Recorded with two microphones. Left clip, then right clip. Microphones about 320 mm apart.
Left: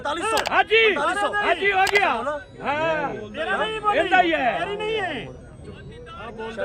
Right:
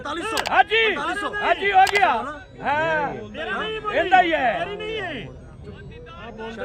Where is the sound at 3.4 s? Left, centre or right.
Centre.